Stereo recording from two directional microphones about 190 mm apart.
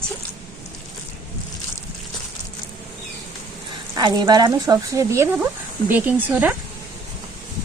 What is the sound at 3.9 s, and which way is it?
Speech, 20° right (ahead or behind).